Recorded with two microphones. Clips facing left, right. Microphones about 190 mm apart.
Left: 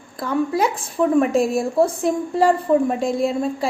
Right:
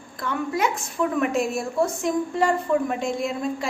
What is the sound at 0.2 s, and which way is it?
A woman's voice, 35° left (ahead or behind).